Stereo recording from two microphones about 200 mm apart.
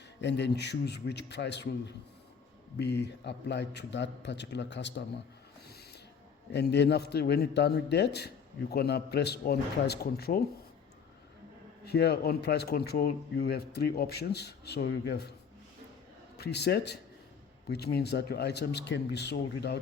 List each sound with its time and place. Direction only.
0.2 s a man's voice: 60° left (ahead or behind)
2.7 s a man's voice: 55° left (ahead or behind)
6.5 s a man's voice: 55° left (ahead or behind)
11.9 s speech: 55° left (ahead or behind)
16.4 s a man's voice: 55° left (ahead or behind)